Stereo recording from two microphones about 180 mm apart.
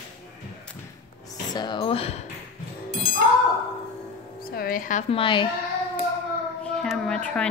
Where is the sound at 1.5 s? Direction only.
25° left (ahead or behind).